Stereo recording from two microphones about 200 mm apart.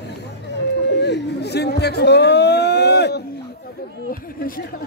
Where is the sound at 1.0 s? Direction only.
55° left (ahead or behind).